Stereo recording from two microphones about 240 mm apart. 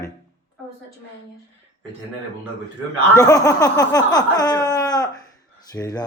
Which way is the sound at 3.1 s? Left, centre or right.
Centre.